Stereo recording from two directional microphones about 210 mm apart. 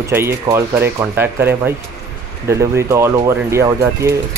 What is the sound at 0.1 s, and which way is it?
Speech, 10° right (ahead or behind).